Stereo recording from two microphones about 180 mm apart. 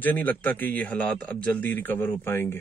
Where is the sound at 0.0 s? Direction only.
10° left (ahead or behind).